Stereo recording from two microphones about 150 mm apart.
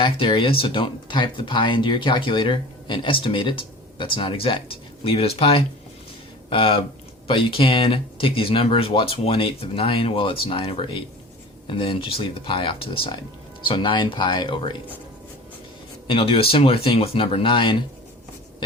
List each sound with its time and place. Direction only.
0.0 s speech: 35° left (ahead or behind)
16.0 s speech: 35° left (ahead or behind)